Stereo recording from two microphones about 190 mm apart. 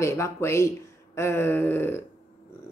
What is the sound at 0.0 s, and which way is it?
A woman's voice, 15° left (ahead or behind).